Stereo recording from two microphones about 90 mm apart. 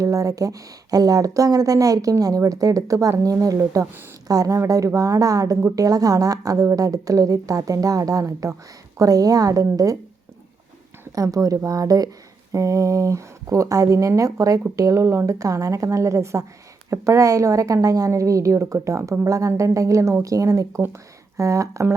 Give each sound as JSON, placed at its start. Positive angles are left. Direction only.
{"t": 0.0, "sound": "speech", "side_deg": -40}
{"t": 11.1, "sound": "speech", "side_deg": -40}